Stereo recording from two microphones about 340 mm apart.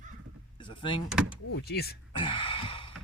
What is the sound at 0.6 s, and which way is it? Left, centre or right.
Door, centre.